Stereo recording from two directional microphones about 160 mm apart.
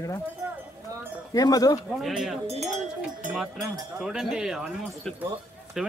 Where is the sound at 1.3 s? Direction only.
25° left (ahead or behind).